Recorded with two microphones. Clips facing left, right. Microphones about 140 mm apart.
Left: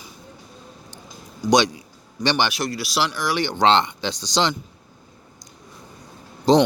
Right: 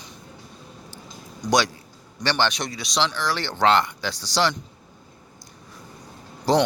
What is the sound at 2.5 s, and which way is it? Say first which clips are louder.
Speech: left 2 dB; 5° left (ahead or behind).